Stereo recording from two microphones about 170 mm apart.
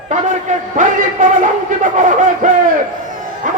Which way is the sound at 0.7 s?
50° right (ahead or behind).